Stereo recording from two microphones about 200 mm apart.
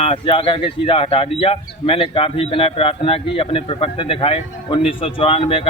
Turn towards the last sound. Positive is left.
turn(degrees=30)  # may be behind; listen again after turning